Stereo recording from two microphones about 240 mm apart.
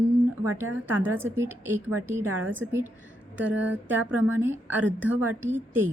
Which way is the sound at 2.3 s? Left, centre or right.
Right.